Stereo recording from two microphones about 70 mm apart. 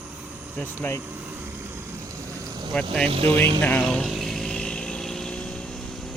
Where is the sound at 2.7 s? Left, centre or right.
Centre.